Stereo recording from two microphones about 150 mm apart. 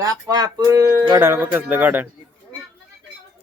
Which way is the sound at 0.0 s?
25° right (ahead or behind).